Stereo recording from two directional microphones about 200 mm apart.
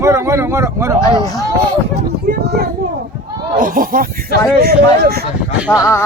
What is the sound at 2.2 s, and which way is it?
Children playing, 50° right (ahead or behind).